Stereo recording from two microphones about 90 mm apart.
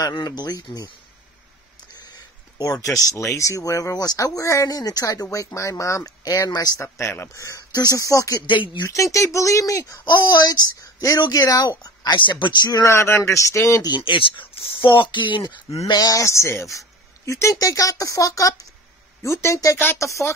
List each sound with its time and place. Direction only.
0.2 s speech: 50° left (ahead or behind)
2.1 s a sound: 40° left (ahead or behind)
3.3 s speech: 35° left (ahead or behind)
7.0 s speech: 30° left (ahead or behind)
8.5 s speech: 60° left (ahead or behind)
8.9 s speech: 35° left (ahead or behind)
10.0 s speech: 55° left (ahead or behind)
11.8 s speech: 55° left (ahead or behind)
12.8 s speech: 30° left (ahead or behind)
13.9 s speech: 65° left (ahead or behind); by 20.3 s 35° left (ahead or behind)